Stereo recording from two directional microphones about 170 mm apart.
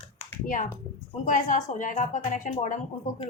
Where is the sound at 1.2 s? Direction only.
50° left (ahead or behind).